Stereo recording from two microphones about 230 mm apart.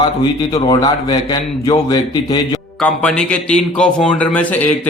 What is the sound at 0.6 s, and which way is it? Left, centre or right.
A man's voice, centre.